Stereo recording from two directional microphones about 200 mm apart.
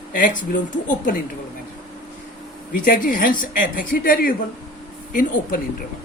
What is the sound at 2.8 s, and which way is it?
A man's voice, 40° left (ahead or behind).